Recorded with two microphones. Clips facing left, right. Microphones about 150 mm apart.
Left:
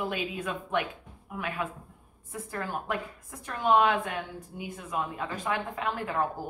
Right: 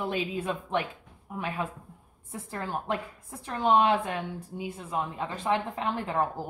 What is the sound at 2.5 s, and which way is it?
A woman's voice, 30° right (ahead or behind).